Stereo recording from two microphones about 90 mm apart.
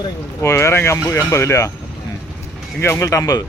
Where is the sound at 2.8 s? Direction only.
30° left (ahead or behind).